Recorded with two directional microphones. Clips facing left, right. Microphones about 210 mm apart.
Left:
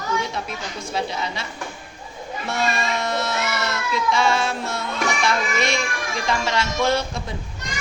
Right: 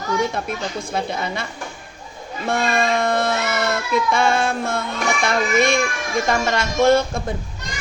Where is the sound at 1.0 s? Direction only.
55° right (ahead or behind).